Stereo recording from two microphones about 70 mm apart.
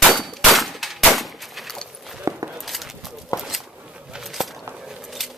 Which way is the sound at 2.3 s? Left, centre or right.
Right.